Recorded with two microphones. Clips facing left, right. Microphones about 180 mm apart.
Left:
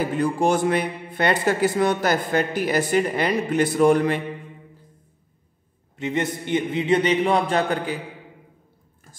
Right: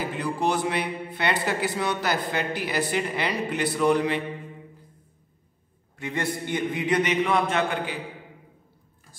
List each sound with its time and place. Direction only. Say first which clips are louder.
0.2 s speech: left 5 dB; 45° left (ahead or behind)
5.9 s a man's voice: left 4 dB; 20° left (ahead or behind); by 7.9 s 35° left (ahead or behind)